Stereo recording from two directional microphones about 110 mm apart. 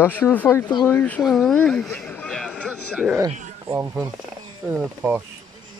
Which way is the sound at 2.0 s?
10° left (ahead or behind).